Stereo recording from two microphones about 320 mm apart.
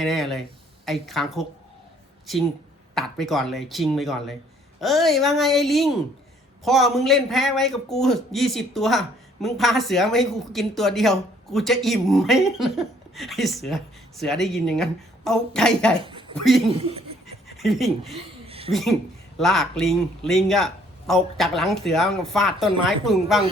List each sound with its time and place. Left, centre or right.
0.0 s a man's voice: centre
2.9 s a man's voice: centre
16.0 s speech: centre
16.3 s a man's voice: centre
18.4 s a sound: centre
18.7 s a man's voice: centre